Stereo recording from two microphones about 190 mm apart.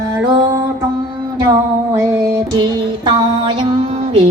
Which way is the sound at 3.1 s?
30° right (ahead or behind).